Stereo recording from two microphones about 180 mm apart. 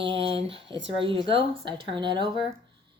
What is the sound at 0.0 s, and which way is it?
Speech, 30° right (ahead or behind).